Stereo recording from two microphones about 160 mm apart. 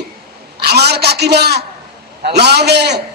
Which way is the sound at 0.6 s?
90° right.